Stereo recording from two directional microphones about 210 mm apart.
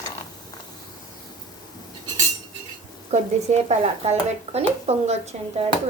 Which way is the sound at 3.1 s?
30° right (ahead or behind).